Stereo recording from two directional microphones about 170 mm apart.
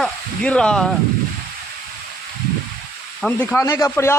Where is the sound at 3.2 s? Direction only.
10° left (ahead or behind).